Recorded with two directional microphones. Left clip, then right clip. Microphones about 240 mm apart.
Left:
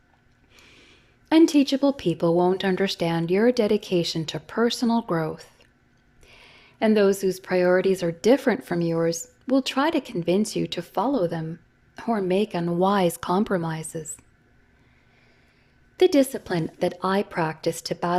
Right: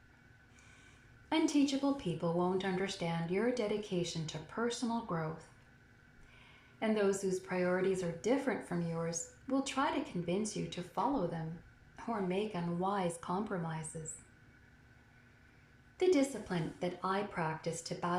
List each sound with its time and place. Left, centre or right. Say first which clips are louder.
1.3 s speech: left 14 dB; left
6.7 s speech: left 13 dB; left
16.0 s speech: left 12 dB; left